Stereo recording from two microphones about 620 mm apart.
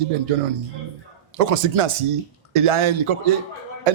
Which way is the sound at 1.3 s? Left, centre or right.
Right.